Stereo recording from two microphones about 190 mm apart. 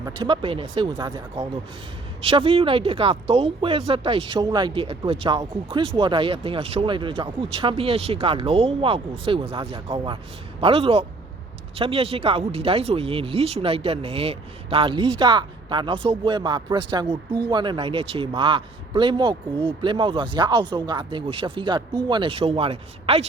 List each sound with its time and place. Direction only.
0.2 s speech: 25° right (ahead or behind)